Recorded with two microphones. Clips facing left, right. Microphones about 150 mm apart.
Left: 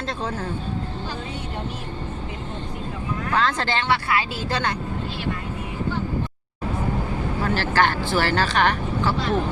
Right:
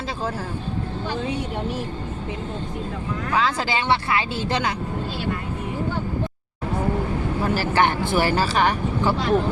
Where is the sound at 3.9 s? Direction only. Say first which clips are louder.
Right 2 dB; 20° right (ahead or behind).